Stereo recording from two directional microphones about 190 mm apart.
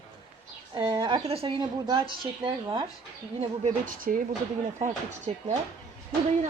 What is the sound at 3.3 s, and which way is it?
Speech, 40° right (ahead or behind).